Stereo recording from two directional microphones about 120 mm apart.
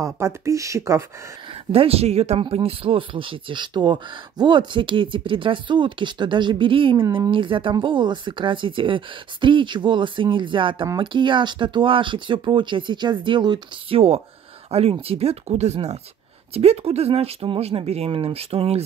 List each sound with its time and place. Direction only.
0.0 s speech: 25° right (ahead or behind)
1.7 s speech: 55° right (ahead or behind)
13.9 s speech: 55° right (ahead or behind)